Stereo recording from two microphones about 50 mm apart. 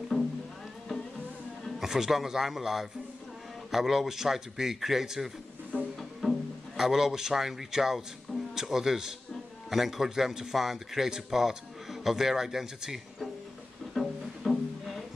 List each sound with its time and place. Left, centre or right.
0.1 s music: left
1.8 s a man's voice: centre
6.2 s music: centre
6.8 s a man's voice: centre
13.9 s music: centre